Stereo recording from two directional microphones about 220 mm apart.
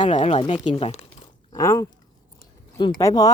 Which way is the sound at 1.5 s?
15° left (ahead or behind).